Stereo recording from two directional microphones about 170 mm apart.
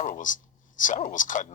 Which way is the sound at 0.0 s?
50° left (ahead or behind).